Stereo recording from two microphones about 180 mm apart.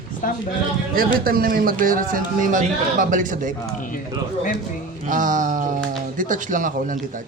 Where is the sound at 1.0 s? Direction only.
55° right (ahead or behind).